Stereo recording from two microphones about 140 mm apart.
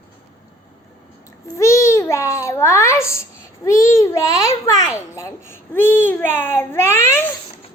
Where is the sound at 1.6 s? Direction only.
20° left (ahead or behind).